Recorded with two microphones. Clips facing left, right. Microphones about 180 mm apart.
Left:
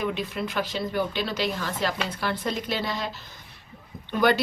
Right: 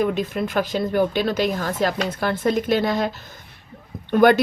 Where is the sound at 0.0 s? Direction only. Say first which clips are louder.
Right 7 dB; 45° right (ahead or behind).